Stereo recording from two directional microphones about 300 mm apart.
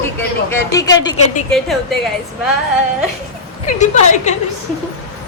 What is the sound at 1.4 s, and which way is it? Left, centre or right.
Speech, centre.